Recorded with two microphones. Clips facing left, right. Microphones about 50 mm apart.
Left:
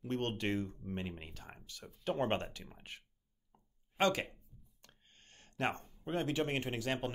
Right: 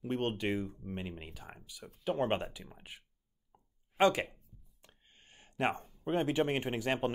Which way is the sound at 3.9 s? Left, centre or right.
Centre.